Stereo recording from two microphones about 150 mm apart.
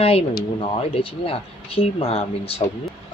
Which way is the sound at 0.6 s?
40° left (ahead or behind).